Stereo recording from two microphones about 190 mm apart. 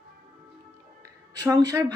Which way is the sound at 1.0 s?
15° right (ahead or behind).